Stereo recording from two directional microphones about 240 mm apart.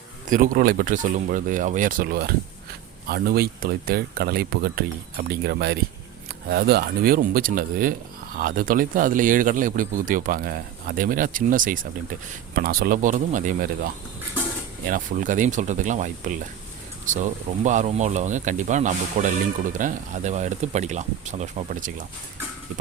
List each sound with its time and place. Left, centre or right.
0.3 s speech: right